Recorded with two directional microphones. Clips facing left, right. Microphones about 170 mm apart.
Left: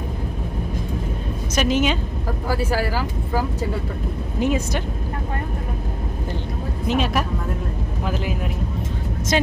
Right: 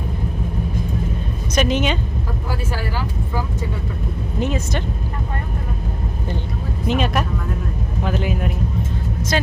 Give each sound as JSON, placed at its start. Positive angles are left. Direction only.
{"t": 1.5, "sound": "speech", "side_deg": 5}
{"t": 2.7, "sound": "speech", "side_deg": 40}
{"t": 4.4, "sound": "speech", "side_deg": 10}
{"t": 6.8, "sound": "speech", "side_deg": 0}
{"t": 9.3, "sound": "speech", "side_deg": 20}